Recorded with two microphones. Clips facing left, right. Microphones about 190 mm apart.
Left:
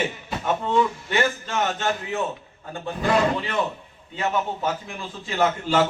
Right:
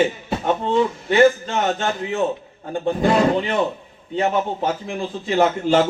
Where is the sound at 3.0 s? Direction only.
30° right (ahead or behind).